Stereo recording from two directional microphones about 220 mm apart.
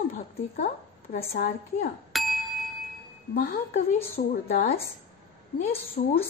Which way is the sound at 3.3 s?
40° left (ahead or behind).